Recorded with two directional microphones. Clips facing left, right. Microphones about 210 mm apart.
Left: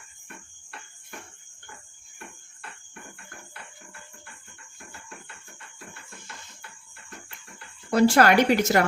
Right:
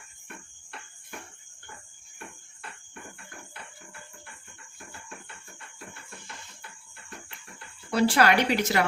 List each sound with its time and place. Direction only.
7.9 s a woman's voice: 45° left (ahead or behind)